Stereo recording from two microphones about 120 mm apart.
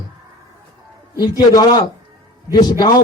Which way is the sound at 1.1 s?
35° left (ahead or behind).